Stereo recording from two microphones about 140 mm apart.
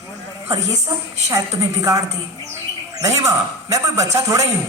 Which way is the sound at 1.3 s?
25° right (ahead or behind).